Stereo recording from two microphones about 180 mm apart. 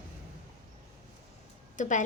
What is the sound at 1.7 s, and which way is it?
Speech, 45° left (ahead or behind).